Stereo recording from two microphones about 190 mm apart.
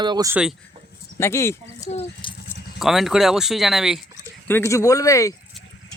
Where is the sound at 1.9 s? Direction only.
35° left (ahead or behind).